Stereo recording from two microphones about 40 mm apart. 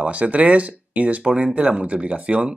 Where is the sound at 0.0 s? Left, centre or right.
Right.